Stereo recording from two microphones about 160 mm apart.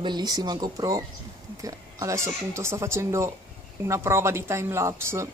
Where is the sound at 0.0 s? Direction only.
25° right (ahead or behind).